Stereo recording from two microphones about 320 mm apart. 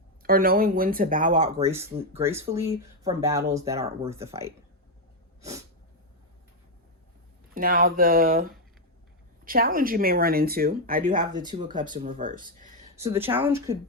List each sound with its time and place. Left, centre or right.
0.2 s speech: right
1.6 s speech: centre
7.5 s speech: right
11.4 s speech: centre
13.1 s speech: centre